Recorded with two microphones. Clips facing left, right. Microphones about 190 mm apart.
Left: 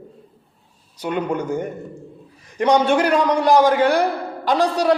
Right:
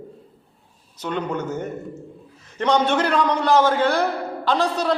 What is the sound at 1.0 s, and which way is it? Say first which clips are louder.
A man's voice: left 3 dB; 10° left (ahead or behind).